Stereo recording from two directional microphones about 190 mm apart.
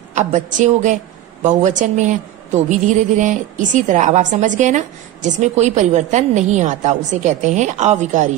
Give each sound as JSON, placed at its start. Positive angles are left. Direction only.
{"t": 0.1, "sound": "a woman's voice", "side_deg": -40}